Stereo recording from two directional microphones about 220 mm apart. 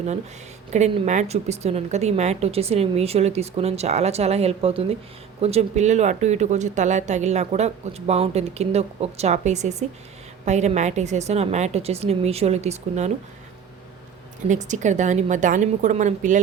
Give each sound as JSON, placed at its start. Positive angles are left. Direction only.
{"t": 0.7, "sound": "a woman's voice", "side_deg": -30}
{"t": 14.4, "sound": "speech", "side_deg": -35}